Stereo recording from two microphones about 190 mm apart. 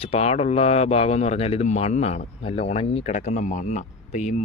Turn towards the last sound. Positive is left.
turn(degrees=40)  # may be behind; listen again after turning